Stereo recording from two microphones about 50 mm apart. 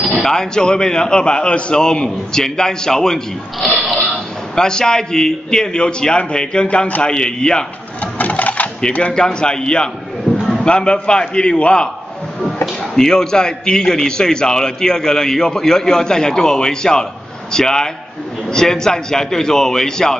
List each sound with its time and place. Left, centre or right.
0.0 s a man's voice: centre
8.0 s sewing machine: left
9.1 s a man's voice: centre
10.3 s a sound: left
10.6 s a man's voice: centre
12.9 s a man's voice: centre